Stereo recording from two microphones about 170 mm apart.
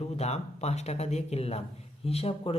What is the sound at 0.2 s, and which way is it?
A man's voice, 40° left (ahead or behind).